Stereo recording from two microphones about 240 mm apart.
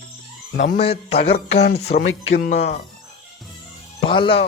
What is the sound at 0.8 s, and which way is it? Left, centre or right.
Speech, left.